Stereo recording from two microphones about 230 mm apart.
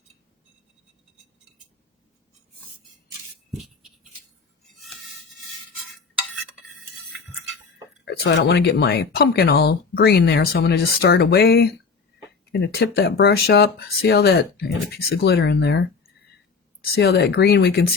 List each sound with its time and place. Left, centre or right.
8.0 s speech: left
16.8 s speech: left